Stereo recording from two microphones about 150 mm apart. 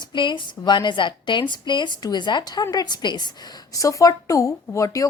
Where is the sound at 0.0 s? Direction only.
30° left (ahead or behind).